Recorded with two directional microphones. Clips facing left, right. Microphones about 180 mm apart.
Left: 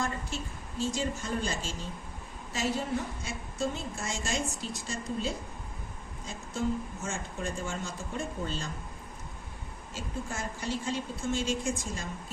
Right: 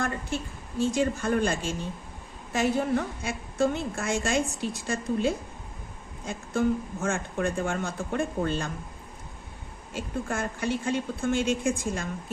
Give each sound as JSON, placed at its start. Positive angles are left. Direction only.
{"t": 0.0, "sound": "a woman's voice", "side_deg": -60}
{"t": 9.9, "sound": "a woman's voice", "side_deg": -60}